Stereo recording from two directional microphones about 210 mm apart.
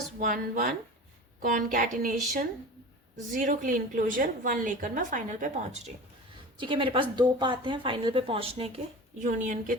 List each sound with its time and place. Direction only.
0.2 s a woman's voice: 40° right (ahead or behind)
3.3 s a woman's voice: 40° right (ahead or behind)
9.2 s a woman's voice: 35° right (ahead or behind)